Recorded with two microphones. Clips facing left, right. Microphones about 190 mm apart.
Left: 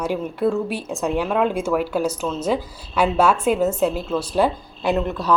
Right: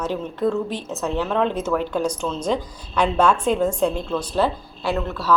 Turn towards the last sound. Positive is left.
turn(degrees=15)  # may be behind; listen again after turning